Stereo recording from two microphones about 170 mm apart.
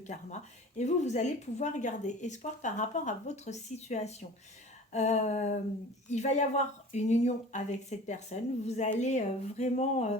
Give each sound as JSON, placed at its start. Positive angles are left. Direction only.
{"t": 0.1, "sound": "a woman's voice", "side_deg": 45}